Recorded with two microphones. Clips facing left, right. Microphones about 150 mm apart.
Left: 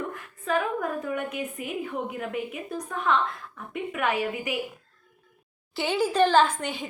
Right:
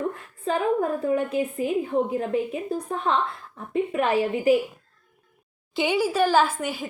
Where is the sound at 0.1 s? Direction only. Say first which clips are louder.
Right 1 dB; 30° right (ahead or behind).